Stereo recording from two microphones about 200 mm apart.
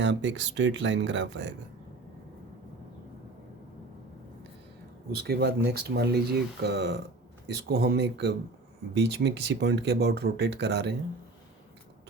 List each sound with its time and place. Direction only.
0.0 s speech: 65° right (ahead or behind)
5.1 s speech: 55° right (ahead or behind)